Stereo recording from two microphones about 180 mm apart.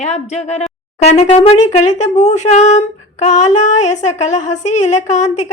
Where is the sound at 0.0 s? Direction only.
40° left (ahead or behind).